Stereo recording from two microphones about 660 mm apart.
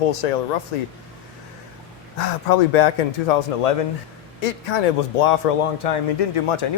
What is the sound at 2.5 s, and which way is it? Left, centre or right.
Speech, left.